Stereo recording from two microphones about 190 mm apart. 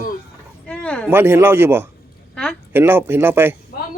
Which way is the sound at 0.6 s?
5° left (ahead or behind).